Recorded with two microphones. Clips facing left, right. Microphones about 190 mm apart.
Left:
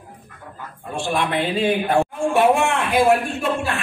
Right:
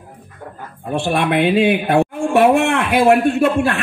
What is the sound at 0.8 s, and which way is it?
A man's voice, 60° right (ahead or behind).